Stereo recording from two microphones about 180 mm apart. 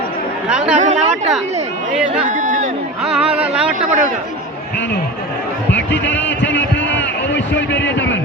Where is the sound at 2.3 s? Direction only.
45° right (ahead or behind).